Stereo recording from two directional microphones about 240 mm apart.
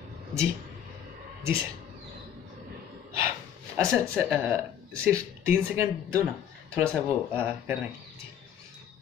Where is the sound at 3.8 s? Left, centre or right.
Centre.